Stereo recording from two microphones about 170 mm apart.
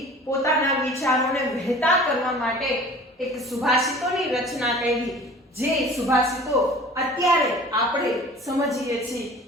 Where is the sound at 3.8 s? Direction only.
Centre (ahead or behind).